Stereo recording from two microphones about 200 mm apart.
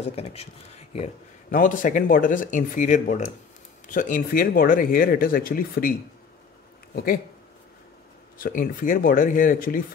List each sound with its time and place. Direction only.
0.0 s speech: 30° left (ahead or behind); by 5.9 s 45° left (ahead or behind)
8.4 s speech: 45° left (ahead or behind)